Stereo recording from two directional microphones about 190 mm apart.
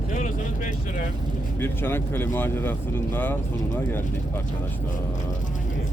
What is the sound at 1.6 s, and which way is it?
Speech, 10° left (ahead or behind).